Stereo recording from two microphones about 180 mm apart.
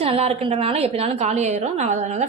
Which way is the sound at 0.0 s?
35° right (ahead or behind).